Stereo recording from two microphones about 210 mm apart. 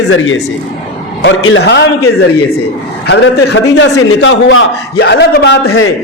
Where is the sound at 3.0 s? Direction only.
55° left (ahead or behind).